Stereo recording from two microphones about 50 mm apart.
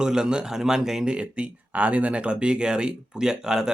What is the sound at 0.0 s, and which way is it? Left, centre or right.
A man's voice, centre.